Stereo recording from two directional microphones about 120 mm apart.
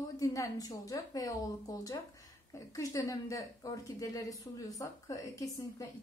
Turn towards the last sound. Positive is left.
turn(degrees=30)  # may be behind; listen again after turning